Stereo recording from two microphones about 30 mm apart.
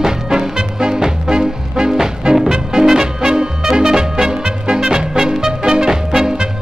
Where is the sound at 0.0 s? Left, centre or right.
Centre.